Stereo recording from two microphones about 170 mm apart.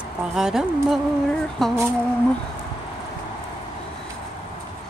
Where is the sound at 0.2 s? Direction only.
5° right (ahead or behind).